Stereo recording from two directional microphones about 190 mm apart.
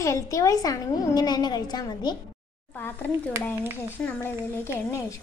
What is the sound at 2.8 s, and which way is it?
Speech, 10° left (ahead or behind).